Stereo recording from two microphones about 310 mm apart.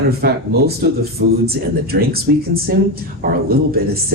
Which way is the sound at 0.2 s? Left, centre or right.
Right.